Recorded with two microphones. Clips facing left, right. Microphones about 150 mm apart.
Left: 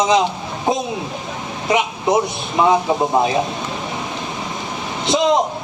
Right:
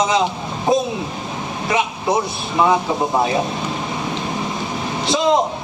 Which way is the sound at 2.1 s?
20° left (ahead or behind).